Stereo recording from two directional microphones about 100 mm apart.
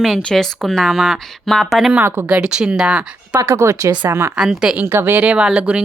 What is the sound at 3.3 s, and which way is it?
Speech, 35° right (ahead or behind).